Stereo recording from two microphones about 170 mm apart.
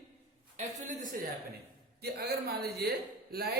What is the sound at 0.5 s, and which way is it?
Speech, 50° right (ahead or behind).